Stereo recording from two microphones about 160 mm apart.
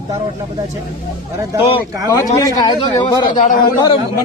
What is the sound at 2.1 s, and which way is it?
A man's voice, 20° left (ahead or behind).